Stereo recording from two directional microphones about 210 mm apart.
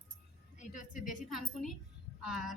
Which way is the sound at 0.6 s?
35° left (ahead or behind).